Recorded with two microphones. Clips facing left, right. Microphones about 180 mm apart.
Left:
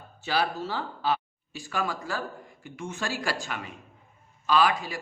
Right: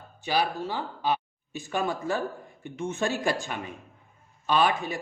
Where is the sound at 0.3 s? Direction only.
15° right (ahead or behind).